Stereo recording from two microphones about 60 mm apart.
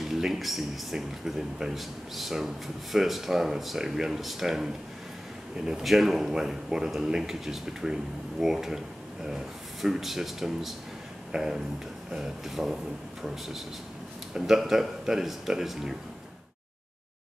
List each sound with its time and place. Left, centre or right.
0.0 s a man's voice: centre
14.3 s a man's voice: centre